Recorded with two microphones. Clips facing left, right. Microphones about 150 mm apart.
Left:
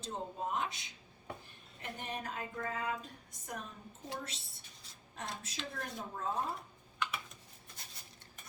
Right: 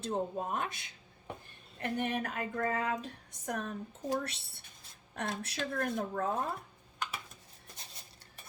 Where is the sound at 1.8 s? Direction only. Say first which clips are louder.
Right 9 dB; 65° right (ahead or behind).